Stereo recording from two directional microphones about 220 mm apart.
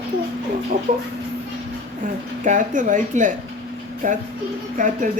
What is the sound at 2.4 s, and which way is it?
Speech, 35° right (ahead or behind).